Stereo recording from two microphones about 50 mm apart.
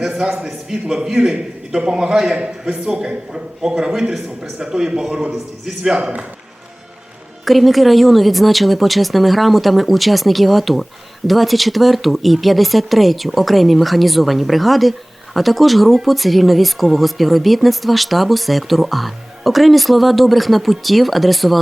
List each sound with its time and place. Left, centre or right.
0.0 s a man's voice: centre
5.9 s a man's voice: centre
7.4 s speech: centre